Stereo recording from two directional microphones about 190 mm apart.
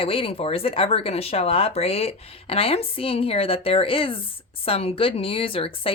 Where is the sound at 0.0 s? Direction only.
30° left (ahead or behind).